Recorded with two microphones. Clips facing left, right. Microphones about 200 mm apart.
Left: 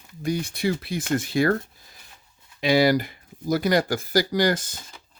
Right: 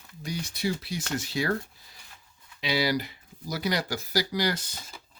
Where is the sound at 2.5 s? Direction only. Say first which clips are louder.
Left 8 dB; 50° left (ahead or behind).